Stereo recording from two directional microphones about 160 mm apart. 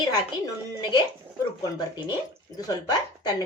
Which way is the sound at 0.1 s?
25° left (ahead or behind).